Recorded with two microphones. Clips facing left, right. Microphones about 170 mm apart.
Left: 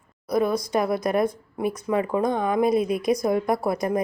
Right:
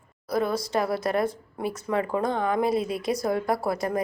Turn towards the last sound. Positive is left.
turn(degrees=20)  # may be behind; listen again after turning